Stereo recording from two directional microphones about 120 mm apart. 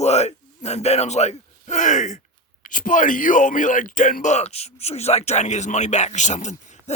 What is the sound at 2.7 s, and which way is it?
Speech, 90° left.